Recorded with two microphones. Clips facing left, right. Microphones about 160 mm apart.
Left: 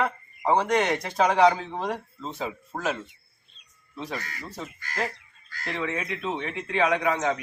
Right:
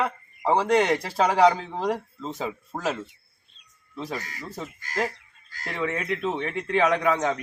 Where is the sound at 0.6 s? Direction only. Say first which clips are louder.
Right 3 dB; 30° right (ahead or behind).